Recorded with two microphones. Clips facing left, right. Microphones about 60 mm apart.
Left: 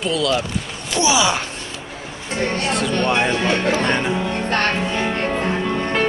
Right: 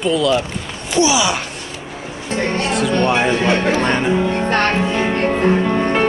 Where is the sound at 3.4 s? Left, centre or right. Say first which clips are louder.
Right 3 dB; right.